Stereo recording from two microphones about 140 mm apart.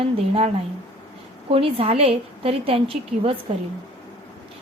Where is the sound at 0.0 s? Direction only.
45° right (ahead or behind).